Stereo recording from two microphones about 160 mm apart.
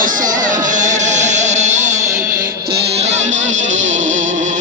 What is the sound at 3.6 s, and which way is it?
Music, 55° right (ahead or behind).